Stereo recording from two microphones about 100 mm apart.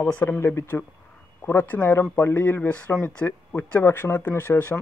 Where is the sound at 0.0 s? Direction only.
15° left (ahead or behind).